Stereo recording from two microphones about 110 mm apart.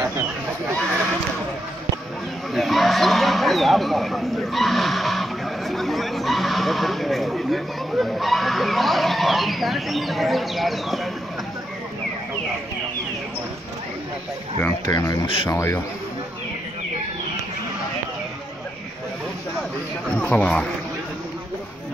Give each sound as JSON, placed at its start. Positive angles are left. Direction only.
{"t": 2.5, "sound": "speech", "side_deg": 0}
{"t": 14.9, "sound": "speech", "side_deg": 35}
{"t": 15.2, "sound": "speech", "side_deg": 55}
{"t": 15.5, "sound": "a man's voice", "side_deg": 20}
{"t": 20.2, "sound": "speech", "side_deg": 10}